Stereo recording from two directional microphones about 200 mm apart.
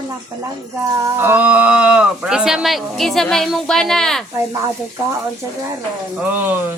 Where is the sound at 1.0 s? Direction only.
10° right (ahead or behind).